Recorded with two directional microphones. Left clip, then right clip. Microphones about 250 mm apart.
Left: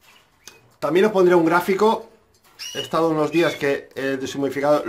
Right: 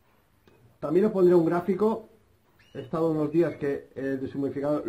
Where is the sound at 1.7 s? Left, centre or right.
Centre.